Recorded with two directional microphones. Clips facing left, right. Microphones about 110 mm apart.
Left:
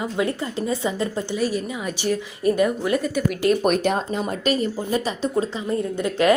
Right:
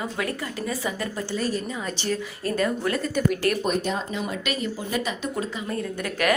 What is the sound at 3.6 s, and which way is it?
Speech, 70° left (ahead or behind).